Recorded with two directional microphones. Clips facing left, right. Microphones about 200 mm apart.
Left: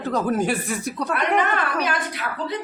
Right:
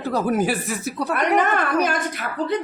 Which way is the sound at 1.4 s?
45° right (ahead or behind).